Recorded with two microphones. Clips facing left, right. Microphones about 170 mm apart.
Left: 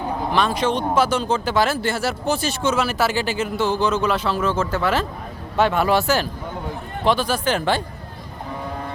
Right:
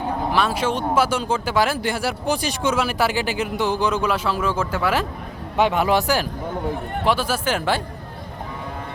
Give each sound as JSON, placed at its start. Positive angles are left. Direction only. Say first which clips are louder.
{"t": 0.3, "sound": "speech", "louder": "left 2 dB", "side_deg": -5}